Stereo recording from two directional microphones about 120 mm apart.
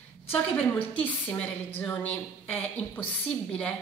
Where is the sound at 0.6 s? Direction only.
10° left (ahead or behind).